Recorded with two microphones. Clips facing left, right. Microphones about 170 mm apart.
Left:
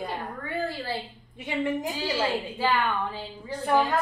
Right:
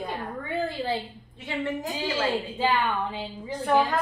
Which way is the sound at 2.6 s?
20° right (ahead or behind).